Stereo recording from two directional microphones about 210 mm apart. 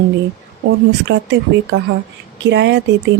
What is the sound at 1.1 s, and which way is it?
Speech, 60° right (ahead or behind).